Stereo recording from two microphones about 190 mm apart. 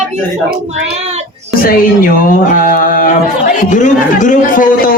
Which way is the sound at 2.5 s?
45° left (ahead or behind).